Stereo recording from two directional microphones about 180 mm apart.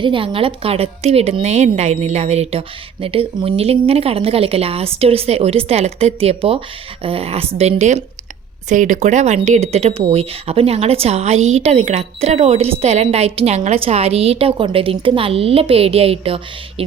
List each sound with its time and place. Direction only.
0.0 s a woman's voice: 30° right (ahead or behind)